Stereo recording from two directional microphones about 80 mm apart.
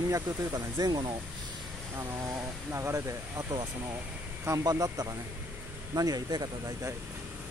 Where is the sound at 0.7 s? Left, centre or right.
Right.